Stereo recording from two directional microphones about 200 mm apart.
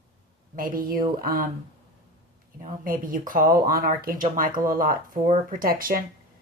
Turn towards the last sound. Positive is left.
turn(degrees=-45)  # may be behind; listen again after turning